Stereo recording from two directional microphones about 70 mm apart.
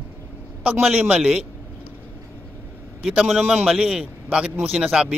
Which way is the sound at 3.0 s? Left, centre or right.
Centre.